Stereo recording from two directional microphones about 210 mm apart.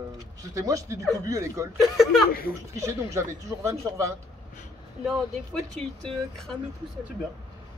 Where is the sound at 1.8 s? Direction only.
Centre (ahead or behind).